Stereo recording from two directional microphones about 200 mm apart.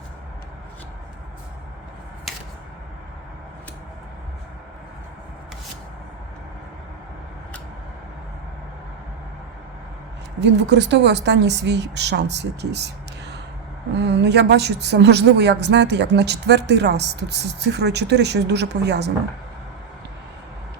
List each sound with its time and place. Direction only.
10.4 s a woman's voice: 60° right (ahead or behind)